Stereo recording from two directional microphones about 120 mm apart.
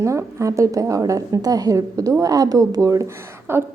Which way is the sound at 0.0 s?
25° right (ahead or behind).